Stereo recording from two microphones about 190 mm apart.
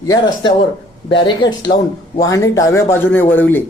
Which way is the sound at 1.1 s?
25° left (ahead or behind).